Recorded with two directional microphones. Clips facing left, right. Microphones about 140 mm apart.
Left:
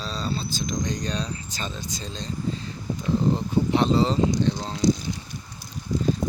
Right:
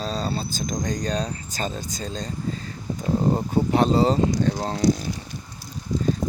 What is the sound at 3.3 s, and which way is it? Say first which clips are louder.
Speech: right 2 dB; 45° right (ahead or behind).